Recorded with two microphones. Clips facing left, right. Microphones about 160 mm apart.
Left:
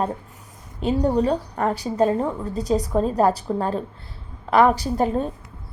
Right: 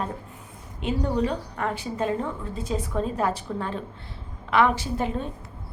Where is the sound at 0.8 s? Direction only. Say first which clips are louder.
Left 5 dB; 40° left (ahead or behind).